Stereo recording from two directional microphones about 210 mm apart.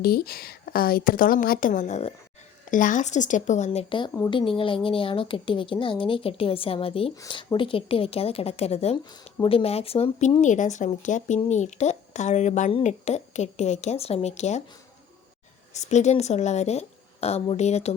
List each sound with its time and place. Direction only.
0.0 s a woman's voice: 45° left (ahead or behind)
15.7 s speech: 35° left (ahead or behind)